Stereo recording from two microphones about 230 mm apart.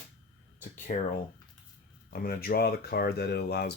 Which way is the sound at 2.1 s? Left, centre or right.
Left.